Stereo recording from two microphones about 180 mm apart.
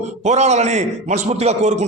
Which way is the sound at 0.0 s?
40° right (ahead or behind).